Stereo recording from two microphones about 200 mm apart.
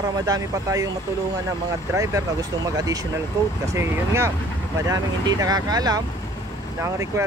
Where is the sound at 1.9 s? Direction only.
15° right (ahead or behind).